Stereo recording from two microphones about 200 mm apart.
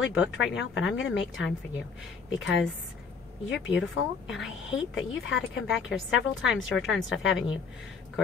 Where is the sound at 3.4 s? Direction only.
70° left (ahead or behind).